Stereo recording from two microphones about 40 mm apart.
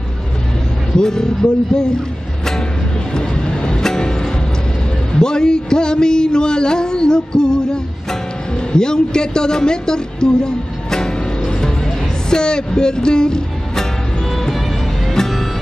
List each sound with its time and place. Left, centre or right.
0.9 s speech: centre
3.1 s music: left
5.2 s a sound: centre
14.3 s music: centre